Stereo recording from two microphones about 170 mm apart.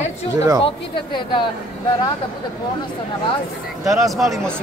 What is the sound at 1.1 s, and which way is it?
Speech, 25° left (ahead or behind).